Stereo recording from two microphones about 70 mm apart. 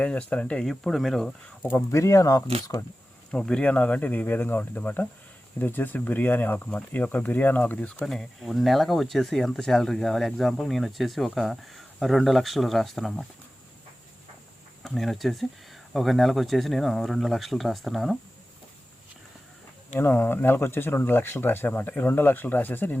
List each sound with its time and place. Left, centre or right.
0.0 s speech: centre
0.6 s speech: centre
1.9 s speech: left
3.3 s speech: centre
8.0 s speech: centre
14.8 s speech: centre
20.0 s speech: left